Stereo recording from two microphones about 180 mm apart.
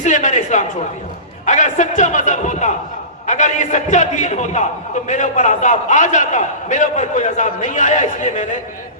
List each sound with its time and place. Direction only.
0.0 s a man's voice: 45° left (ahead or behind)